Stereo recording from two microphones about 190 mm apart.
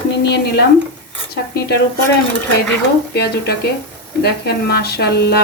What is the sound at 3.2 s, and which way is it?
A woman's voice, 55° left (ahead or behind).